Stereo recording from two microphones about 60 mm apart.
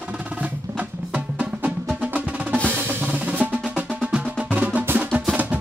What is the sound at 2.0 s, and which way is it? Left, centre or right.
Percussion, right.